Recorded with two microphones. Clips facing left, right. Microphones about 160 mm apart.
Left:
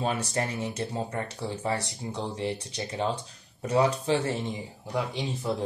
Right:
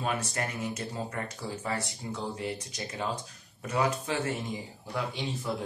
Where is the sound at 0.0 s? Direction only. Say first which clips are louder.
Left 3 dB; 30° left (ahead or behind).